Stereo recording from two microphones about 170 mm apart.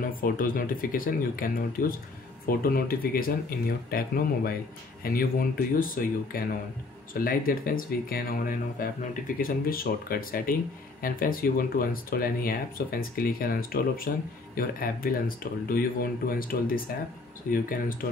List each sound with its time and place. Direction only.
0.0 s speech: 55° left (ahead or behind)